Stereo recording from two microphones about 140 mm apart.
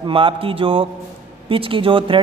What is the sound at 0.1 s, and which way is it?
A man's voice, 40° right (ahead or behind).